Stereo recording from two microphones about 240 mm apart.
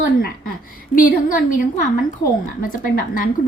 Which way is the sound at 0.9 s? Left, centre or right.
Left.